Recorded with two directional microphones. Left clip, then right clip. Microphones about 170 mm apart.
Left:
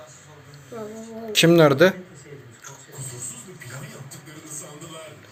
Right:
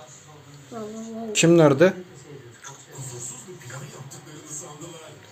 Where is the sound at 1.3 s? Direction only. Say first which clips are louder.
Left 1 dB; 5° right (ahead or behind).